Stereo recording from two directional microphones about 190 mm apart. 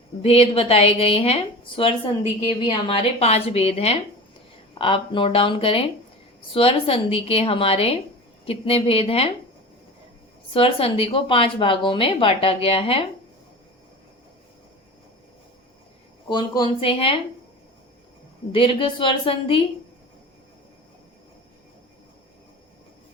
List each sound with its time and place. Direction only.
0.2 s a woman's voice: 30° left (ahead or behind)
10.5 s a woman's voice: 30° left (ahead or behind)
16.3 s a woman's voice: 25° left (ahead or behind)
18.5 s a woman's voice: 25° left (ahead or behind)